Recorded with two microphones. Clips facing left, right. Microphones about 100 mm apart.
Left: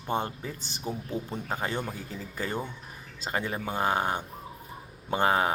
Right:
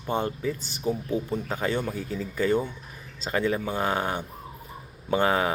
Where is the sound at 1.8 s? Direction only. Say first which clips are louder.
Right 5 dB; 15° left (ahead or behind).